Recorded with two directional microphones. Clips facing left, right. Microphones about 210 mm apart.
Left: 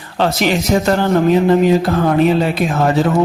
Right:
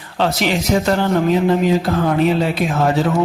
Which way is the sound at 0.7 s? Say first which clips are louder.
Left 2 dB; 45° left (ahead or behind).